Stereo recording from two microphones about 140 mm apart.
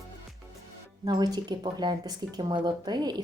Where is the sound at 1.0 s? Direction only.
30° right (ahead or behind).